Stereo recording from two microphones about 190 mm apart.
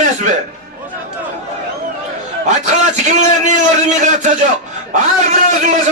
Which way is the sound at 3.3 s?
40° right (ahead or behind).